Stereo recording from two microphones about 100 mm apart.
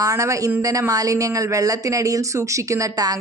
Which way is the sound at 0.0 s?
30° right (ahead or behind).